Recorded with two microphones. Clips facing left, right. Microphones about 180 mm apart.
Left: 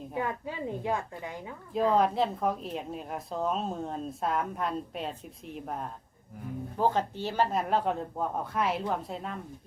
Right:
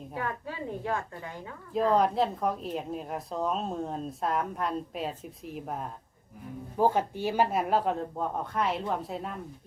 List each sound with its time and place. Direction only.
0.1 s a woman's voice: 15° left (ahead or behind)
1.7 s a woman's voice: centre (ahead or behind)